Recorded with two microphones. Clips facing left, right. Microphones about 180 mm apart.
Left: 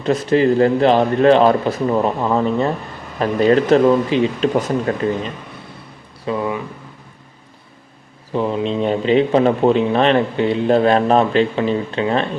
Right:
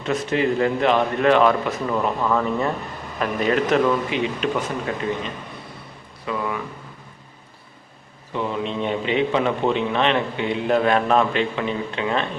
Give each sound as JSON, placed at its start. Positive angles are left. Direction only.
{"t": 0.0, "sound": "a man's voice", "side_deg": 35}
{"t": 6.2, "sound": "speech", "side_deg": 25}
{"t": 8.3, "sound": "a man's voice", "side_deg": 35}